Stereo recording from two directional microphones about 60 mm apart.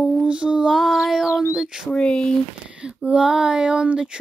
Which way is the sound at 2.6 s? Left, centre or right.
Centre.